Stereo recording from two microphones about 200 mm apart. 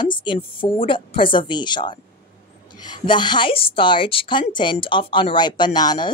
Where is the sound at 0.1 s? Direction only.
25° left (ahead or behind).